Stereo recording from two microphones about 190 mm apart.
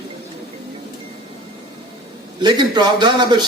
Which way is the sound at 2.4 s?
25° right (ahead or behind).